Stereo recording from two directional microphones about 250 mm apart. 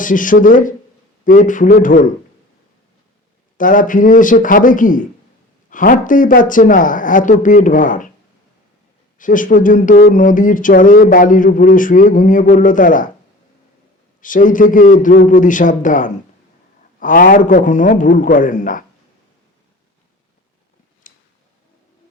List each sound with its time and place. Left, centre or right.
0.0 s speech: left
3.6 s speech: left
9.1 s speech: left
14.2 s speech: left
21.0 s a sound: left